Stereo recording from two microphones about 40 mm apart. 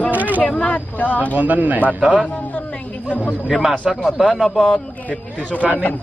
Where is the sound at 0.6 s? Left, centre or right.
Left.